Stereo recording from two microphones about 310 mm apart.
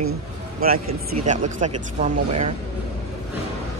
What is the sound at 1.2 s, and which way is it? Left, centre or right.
Speech, right.